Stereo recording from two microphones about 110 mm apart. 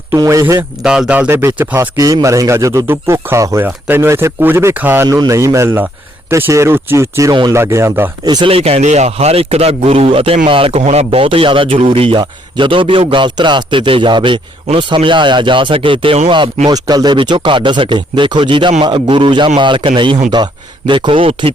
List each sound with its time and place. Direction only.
0.1 s speech: 30° right (ahead or behind)
0.8 s speech: 5° right (ahead or behind)
1.3 s speech: 20° right (ahead or behind)
2.2 s speech: 30° right (ahead or behind)
5.0 s speech: 35° right (ahead or behind)
8.2 s speech: 35° right (ahead or behind)
8.4 s a man's voice: 65° right (ahead or behind)
16.6 s a man's voice: 35° right (ahead or behind); by 21.5 s 55° right (ahead or behind)